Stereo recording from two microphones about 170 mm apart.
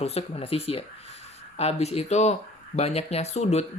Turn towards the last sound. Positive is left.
turn(degrees=40)  # may be behind; listen again after turning